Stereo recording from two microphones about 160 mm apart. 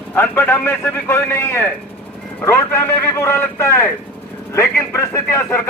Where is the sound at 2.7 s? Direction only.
15° left (ahead or behind).